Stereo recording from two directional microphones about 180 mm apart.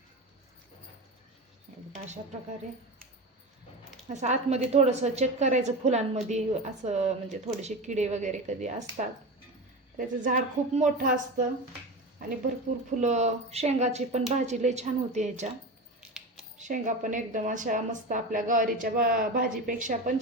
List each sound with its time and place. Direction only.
4.1 s a woman's voice: 40° right (ahead or behind)
10.0 s a woman's voice: 45° right (ahead or behind)
13.0 s a woman's voice: 40° right (ahead or behind)
16.6 s a woman's voice: 45° right (ahead or behind)